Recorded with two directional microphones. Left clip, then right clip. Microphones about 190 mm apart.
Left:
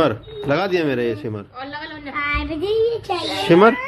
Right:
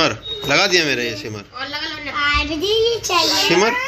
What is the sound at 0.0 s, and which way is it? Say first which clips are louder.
Speech: right 1 dB; 30° left (ahead or behind).